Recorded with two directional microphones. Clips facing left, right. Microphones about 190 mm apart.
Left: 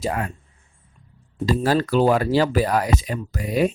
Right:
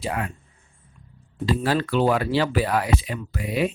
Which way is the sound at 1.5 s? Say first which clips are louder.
Left 3 dB; 40° left (ahead or behind).